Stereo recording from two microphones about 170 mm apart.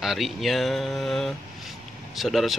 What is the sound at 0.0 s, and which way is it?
Speech, centre (ahead or behind).